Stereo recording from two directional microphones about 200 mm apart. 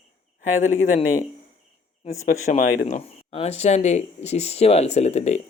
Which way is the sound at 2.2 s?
40° left (ahead or behind).